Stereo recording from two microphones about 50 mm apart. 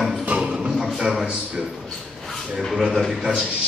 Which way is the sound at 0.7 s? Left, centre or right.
Centre.